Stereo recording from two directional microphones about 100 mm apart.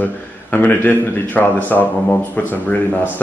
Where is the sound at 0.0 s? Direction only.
15° left (ahead or behind).